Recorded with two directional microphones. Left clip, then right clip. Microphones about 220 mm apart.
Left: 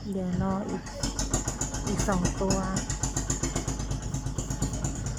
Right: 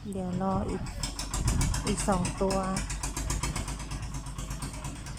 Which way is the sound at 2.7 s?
40° left (ahead or behind).